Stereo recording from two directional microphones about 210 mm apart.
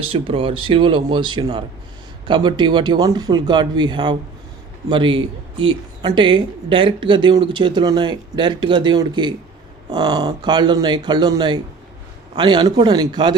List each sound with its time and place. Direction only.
0.0 s speech: 25° right (ahead or behind)